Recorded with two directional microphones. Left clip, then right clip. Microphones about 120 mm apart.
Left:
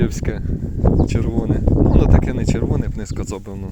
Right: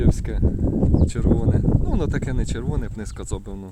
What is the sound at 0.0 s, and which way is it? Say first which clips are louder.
Speech: left 1 dB; 15° left (ahead or behind).